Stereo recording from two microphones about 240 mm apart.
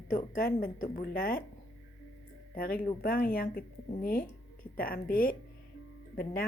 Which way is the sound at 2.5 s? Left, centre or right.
Left.